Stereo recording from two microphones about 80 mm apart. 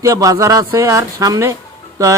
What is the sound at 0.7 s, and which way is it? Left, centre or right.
Speech, right.